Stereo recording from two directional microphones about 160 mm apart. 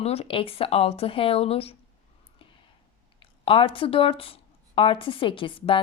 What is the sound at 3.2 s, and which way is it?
Speech, 35° left (ahead or behind).